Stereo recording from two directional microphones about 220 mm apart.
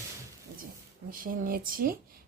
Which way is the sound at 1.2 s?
40° right (ahead or behind).